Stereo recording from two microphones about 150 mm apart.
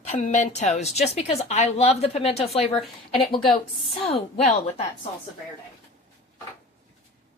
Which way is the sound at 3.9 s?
40° left (ahead or behind).